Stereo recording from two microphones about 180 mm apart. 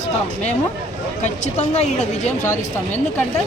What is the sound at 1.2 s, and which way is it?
A woman's voice, 40° left (ahead or behind).